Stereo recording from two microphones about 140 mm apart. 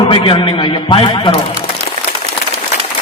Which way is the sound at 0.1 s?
35° left (ahead or behind).